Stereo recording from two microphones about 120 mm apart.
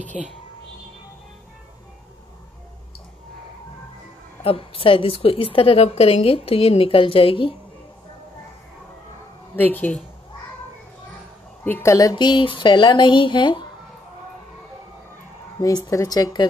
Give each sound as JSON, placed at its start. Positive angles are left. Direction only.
{"t": 4.4, "sound": "a woman's voice", "side_deg": 50}
{"t": 9.6, "sound": "speech", "side_deg": 15}
{"t": 11.6, "sound": "speech", "side_deg": 20}
{"t": 15.6, "sound": "speech", "side_deg": 25}